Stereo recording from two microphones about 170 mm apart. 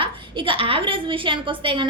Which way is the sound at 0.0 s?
30° right (ahead or behind).